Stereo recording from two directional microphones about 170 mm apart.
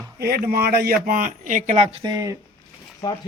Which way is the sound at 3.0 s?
20° left (ahead or behind).